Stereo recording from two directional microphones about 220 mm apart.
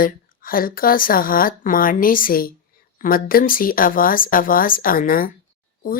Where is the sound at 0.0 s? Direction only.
40° left (ahead or behind).